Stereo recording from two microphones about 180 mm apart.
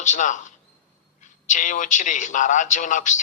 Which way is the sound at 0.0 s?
40° left (ahead or behind).